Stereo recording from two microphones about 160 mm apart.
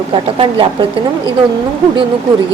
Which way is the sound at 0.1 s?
35° right (ahead or behind).